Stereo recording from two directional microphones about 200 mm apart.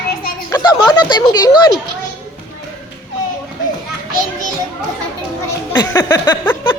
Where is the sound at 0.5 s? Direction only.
20° left (ahead or behind).